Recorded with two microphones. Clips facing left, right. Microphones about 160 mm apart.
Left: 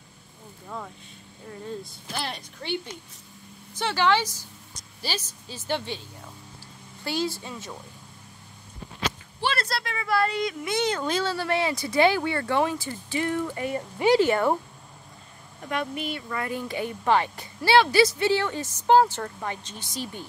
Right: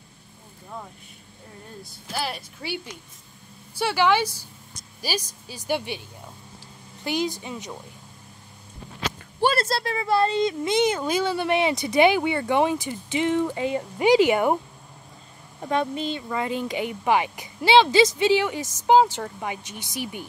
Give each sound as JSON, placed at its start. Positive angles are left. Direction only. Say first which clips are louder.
{"t": 1.5, "sound": "a woman's voice", "louder": "left 8 dB", "side_deg": -5}
{"t": 9.6, "sound": "speech", "louder": "right 5 dB", "side_deg": -30}
{"t": 15.6, "sound": "speech", "louder": "right 5 dB", "side_deg": -25}